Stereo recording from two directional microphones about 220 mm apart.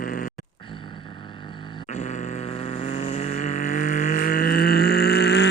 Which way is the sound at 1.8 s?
30° left (ahead or behind).